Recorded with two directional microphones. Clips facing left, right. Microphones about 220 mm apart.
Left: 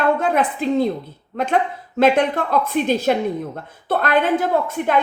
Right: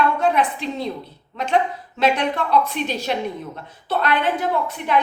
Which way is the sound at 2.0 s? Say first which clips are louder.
Left 4 dB; 50° left (ahead or behind).